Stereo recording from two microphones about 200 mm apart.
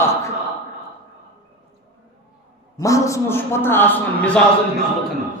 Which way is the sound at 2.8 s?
15° left (ahead or behind).